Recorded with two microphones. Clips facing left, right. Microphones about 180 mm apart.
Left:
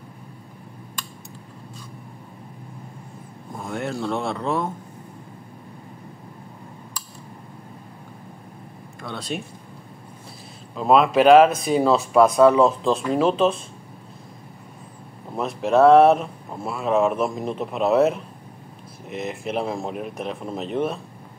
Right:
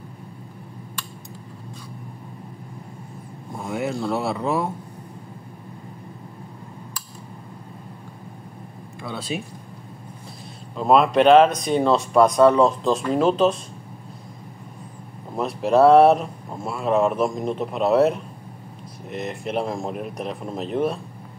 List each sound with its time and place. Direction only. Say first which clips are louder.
3.5 s speech: right 2 dB; 5° right (ahead or behind)
9.0 s speech: right 1 dB; 5° right (ahead or behind)
10.8 s speech: even; centre (ahead or behind)
15.3 s speech: right 1 dB; centre (ahead or behind)